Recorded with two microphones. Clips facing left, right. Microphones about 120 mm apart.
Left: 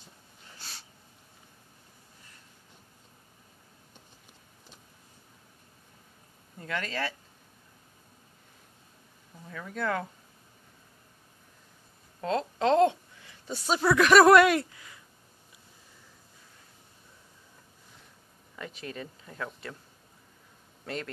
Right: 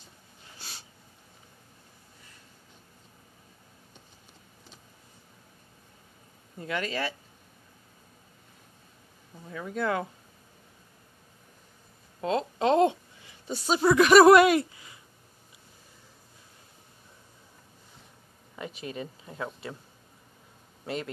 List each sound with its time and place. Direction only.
6.7 s speech: 15° right (ahead or behind)
9.5 s speech: 25° right (ahead or behind)
12.2 s speech: 15° right (ahead or behind)
18.6 s speech: 15° right (ahead or behind)
20.8 s a man's voice: 15° right (ahead or behind)